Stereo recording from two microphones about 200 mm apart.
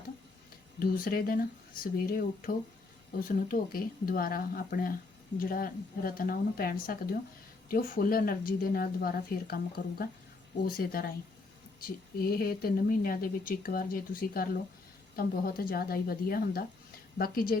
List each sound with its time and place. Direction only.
0.8 s a woman's voice: 45° left (ahead or behind)